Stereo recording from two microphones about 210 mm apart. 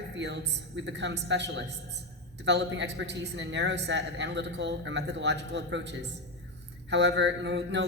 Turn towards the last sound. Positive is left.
turn(degrees=-55)  # may be behind; listen again after turning